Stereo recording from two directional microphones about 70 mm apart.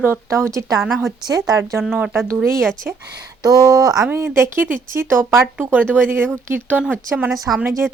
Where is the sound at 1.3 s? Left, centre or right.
Right.